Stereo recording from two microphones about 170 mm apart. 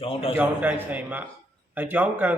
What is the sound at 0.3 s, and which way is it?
A man's voice, 10° right (ahead or behind).